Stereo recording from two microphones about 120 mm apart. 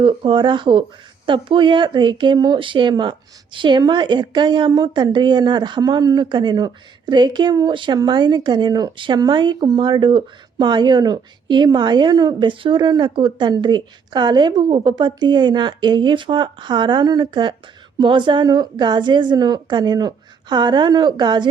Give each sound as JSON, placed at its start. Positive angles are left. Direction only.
{"t": 0.0, "sound": "speech", "side_deg": -45}